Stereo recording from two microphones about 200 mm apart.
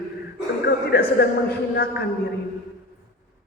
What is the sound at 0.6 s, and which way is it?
A man's voice, 50° left (ahead or behind).